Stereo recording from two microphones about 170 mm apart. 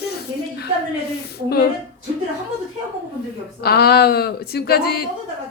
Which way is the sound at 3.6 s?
65° left (ahead or behind).